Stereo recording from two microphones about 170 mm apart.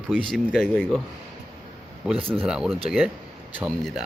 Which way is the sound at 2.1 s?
30° right (ahead or behind).